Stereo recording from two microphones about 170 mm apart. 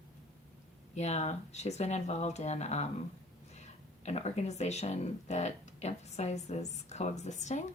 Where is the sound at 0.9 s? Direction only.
40° left (ahead or behind).